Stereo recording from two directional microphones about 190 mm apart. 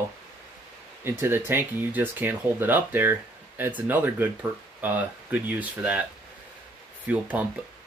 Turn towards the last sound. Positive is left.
turn(degrees=-10)  # may be behind; listen again after turning